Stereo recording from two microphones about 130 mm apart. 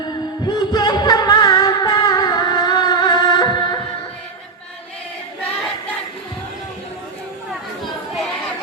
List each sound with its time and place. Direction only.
0.4 s music: 35° left (ahead or behind)